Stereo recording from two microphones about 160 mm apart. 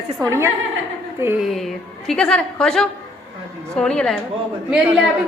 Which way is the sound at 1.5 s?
Centre (ahead or behind).